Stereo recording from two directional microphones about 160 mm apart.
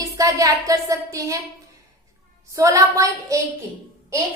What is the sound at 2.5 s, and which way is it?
Speech, 20° right (ahead or behind).